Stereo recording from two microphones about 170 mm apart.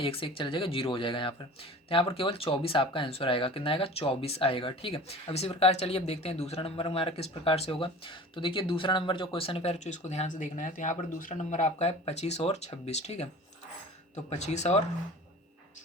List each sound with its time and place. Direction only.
0.0 s speech: 35° left (ahead or behind)
14.3 s speech: 40° left (ahead or behind)